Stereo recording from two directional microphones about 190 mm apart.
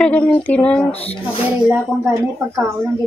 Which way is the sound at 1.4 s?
10° right (ahead or behind).